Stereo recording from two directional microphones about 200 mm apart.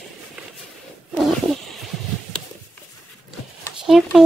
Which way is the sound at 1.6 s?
Centre (ahead or behind).